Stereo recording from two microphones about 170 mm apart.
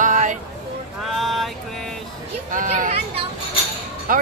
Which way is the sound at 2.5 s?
50° right (ahead or behind).